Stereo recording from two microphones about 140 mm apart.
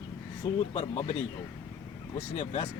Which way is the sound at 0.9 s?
50° left (ahead or behind).